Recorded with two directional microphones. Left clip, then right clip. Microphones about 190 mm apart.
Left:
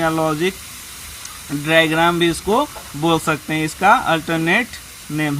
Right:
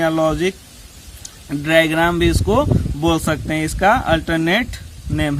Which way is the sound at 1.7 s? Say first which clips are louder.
Even; 35° right (ahead or behind).